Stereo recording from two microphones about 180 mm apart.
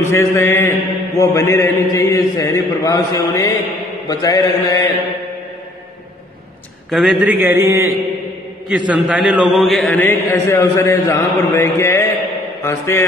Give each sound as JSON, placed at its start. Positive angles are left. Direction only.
{"t": 0.0, "sound": "mantra", "side_deg": 15}
{"t": 6.9, "sound": "a man's voice", "side_deg": 0}
{"t": 7.3, "sound": "a man's voice", "side_deg": -15}
{"t": 8.6, "sound": "mantra", "side_deg": -5}